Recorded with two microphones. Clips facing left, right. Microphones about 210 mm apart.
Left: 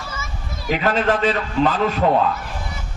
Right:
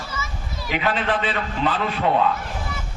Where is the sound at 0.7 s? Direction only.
40° left (ahead or behind).